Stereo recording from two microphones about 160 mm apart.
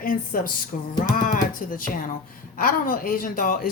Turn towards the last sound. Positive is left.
turn(degrees=60)  # may be behind; listen again after turning